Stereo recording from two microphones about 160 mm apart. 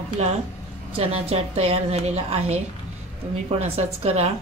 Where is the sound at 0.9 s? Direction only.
35° right (ahead or behind).